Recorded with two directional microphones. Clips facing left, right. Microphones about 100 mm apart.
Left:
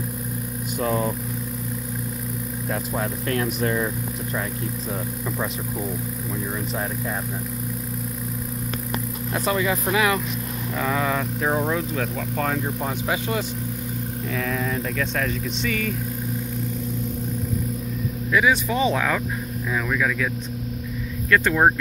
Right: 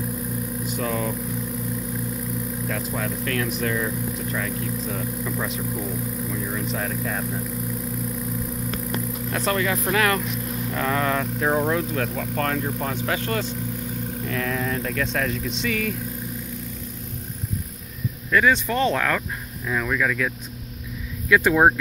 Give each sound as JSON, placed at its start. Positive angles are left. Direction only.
{"t": 0.8, "sound": "speech", "side_deg": 30}
{"t": 2.7, "sound": "speech", "side_deg": 25}
{"t": 6.3, "sound": "speech", "side_deg": 20}
{"t": 9.3, "sound": "speech", "side_deg": 10}
{"t": 14.3, "sound": "speech", "side_deg": 0}
{"t": 18.3, "sound": "speech", "side_deg": 5}
{"t": 21.3, "sound": "speech", "side_deg": -10}